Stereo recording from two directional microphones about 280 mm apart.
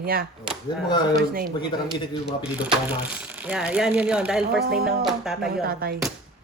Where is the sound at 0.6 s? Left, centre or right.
Centre.